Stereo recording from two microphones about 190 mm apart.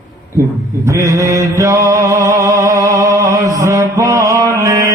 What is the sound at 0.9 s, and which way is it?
Mantra, 15° right (ahead or behind).